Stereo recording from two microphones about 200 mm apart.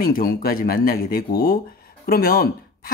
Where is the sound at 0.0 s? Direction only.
45° left (ahead or behind).